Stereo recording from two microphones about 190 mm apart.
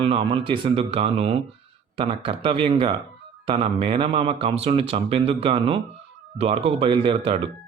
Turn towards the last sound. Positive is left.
turn(degrees=-30)  # may be behind; listen again after turning